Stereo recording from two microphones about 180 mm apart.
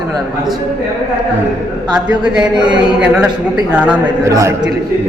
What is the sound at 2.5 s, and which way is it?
Speech, 25° right (ahead or behind).